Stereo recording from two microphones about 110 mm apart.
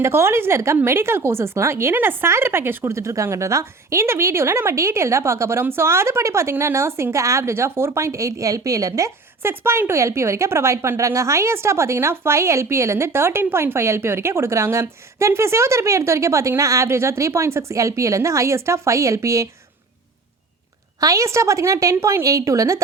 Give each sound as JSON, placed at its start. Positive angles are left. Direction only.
{"t": 0.0, "sound": "a woman's voice", "side_deg": -25}
{"t": 21.0, "sound": "a woman's voice", "side_deg": -30}